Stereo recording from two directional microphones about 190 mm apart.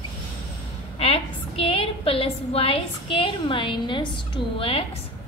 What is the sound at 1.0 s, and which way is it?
A woman's voice, 30° left (ahead or behind).